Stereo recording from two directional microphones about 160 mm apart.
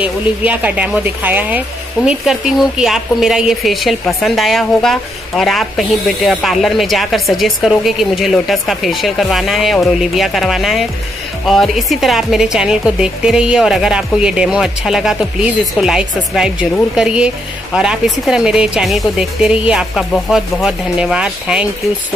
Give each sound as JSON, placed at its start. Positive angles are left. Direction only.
{"t": 0.0, "sound": "a woman's voice", "side_deg": -10}